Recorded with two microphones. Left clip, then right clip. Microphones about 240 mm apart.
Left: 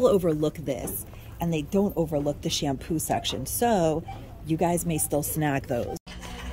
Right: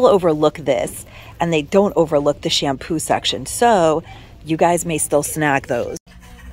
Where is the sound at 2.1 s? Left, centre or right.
Centre.